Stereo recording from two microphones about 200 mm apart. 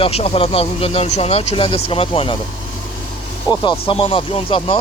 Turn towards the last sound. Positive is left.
turn(degrees=30)  # may be behind; listen again after turning